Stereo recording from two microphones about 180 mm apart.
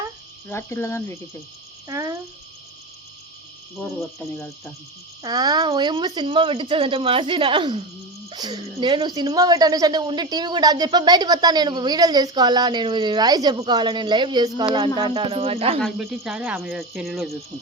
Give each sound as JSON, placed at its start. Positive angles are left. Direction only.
{"t": 0.4, "sound": "cricket", "side_deg": 15}
{"t": 1.9, "sound": "speech", "side_deg": -15}
{"t": 3.8, "sound": "cricket", "side_deg": 10}
{"t": 5.2, "sound": "speech", "side_deg": -20}
{"t": 15.8, "sound": "speech", "side_deg": 0}